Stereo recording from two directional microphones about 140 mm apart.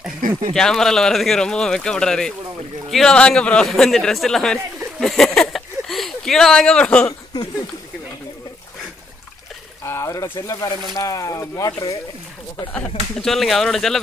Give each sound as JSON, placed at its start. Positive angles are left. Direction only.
{"t": 0.6, "sound": "speech", "side_deg": 5}
{"t": 9.8, "sound": "speech", "side_deg": 20}
{"t": 12.7, "sound": "speech", "side_deg": 5}